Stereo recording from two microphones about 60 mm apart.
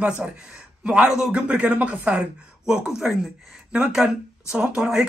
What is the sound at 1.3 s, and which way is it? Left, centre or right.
Speech, centre.